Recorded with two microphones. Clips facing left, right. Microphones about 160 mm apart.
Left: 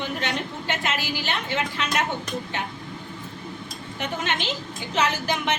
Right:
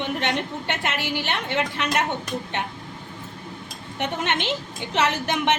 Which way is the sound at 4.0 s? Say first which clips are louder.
Right 3 dB; 65° right (ahead or behind).